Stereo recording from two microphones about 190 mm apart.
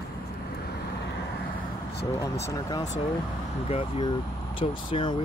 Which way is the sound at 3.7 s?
30° left (ahead or behind).